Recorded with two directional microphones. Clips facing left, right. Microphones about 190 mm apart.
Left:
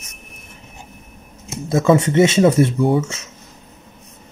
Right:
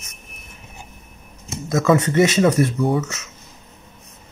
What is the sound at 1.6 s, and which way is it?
Speech, 30° left (ahead or behind).